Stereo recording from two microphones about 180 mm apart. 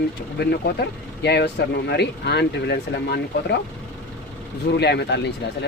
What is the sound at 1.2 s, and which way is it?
Speech, 70° left (ahead or behind).